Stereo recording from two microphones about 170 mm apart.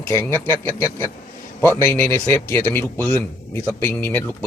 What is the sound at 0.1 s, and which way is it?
Speech, 15° left (ahead or behind).